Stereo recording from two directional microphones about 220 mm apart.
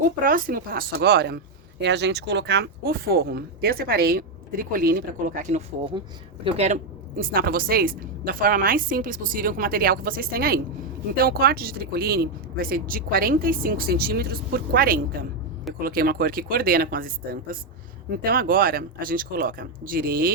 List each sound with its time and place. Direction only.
0.0 s a woman's voice: 40° right (ahead or behind)
7.2 s a woman's voice: 40° right (ahead or behind)
18.2 s a woman's voice: 40° right (ahead or behind)